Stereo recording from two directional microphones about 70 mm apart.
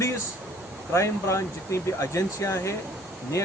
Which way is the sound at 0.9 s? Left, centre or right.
Left.